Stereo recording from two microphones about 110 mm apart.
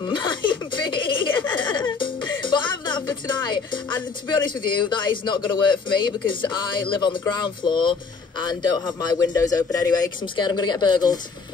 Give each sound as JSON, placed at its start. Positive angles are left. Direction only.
{"t": 0.0, "sound": "a sound", "side_deg": 45}
{"t": 4.3, "sound": "a man's voice", "side_deg": 45}
{"t": 10.2, "sound": "speech", "side_deg": 45}